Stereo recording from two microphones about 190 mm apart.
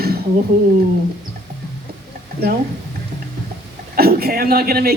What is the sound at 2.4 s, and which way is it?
Speech, 55° right (ahead or behind).